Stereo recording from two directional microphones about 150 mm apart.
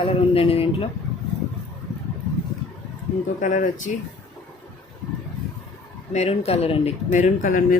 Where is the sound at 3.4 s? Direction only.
60° left (ahead or behind).